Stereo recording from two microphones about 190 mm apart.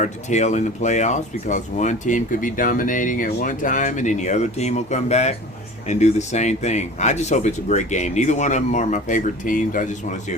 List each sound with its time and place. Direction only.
0.0 s speech: 40° left (ahead or behind)